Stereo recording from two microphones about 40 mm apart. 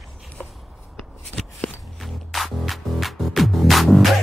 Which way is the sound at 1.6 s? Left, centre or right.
Left.